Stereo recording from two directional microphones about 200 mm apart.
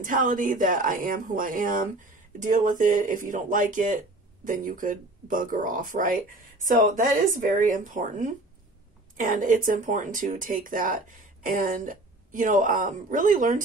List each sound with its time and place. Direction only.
0.0 s speech: 40° right (ahead or behind)